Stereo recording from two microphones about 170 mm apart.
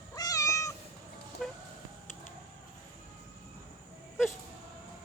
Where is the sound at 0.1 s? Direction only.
20° left (ahead or behind).